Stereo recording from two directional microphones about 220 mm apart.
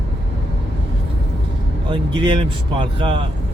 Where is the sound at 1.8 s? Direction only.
20° right (ahead or behind).